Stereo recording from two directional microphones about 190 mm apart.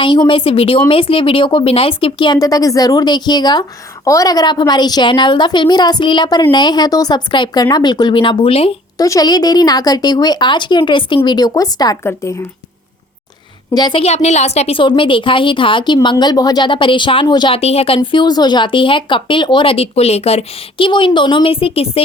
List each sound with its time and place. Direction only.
0.0 s a woman's voice: 25° left (ahead or behind)
9.0 s a woman's voice: 20° left (ahead or behind)
13.7 s a woman's voice: 25° left (ahead or behind)